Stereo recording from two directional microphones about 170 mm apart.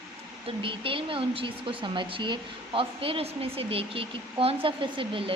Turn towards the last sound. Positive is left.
turn(degrees=-30)  # may be behind; listen again after turning